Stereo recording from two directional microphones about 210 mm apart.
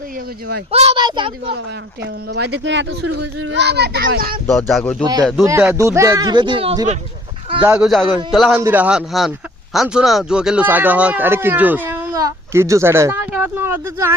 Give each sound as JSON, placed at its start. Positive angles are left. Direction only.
{"t": 0.7, "sound": "a woman's voice", "side_deg": -30}
{"t": 2.4, "sound": "a child's voice", "side_deg": -60}
{"t": 4.4, "sound": "a man's voice", "side_deg": 0}
{"t": 5.5, "sound": "speech", "side_deg": -15}
{"t": 7.6, "sound": "a man's voice", "side_deg": -5}